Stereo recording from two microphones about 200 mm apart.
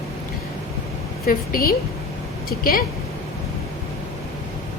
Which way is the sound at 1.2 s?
45° left (ahead or behind).